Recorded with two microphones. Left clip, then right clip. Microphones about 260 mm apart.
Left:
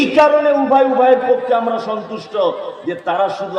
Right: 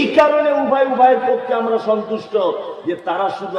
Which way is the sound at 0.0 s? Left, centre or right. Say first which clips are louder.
Left 2 dB; left.